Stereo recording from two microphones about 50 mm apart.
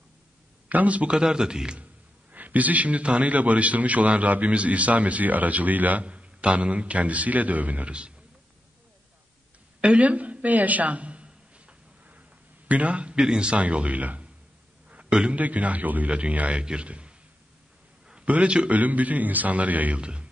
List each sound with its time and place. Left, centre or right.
0.7 s a man's voice: right
1.1 s a man's voice: centre
2.3 s a man's voice: right
9.8 s a sound: right
12.6 s a man's voice: right
14.9 s a sound: right
15.3 s a man's voice: right
18.2 s a man's voice: right
20.0 s a man's voice: centre